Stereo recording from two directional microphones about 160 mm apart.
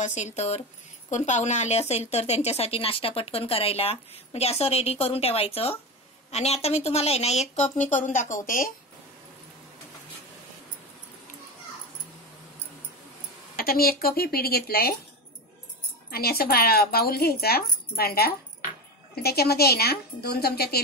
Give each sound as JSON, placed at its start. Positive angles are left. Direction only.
{"t": 0.0, "sound": "speech", "side_deg": 45}
{"t": 13.6, "sound": "speech", "side_deg": 70}
{"t": 16.1, "sound": "speech", "side_deg": 70}